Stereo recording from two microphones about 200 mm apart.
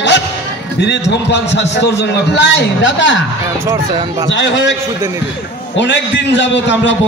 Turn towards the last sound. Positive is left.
turn(degrees=65)  # may be behind; listen again after turning